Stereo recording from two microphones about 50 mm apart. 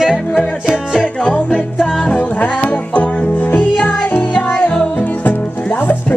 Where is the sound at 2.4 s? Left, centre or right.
Left.